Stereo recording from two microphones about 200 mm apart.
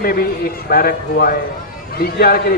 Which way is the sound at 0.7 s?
50° left (ahead or behind).